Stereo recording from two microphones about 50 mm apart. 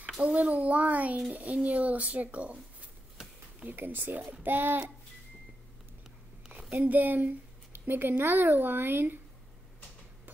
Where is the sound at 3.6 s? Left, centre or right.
Right.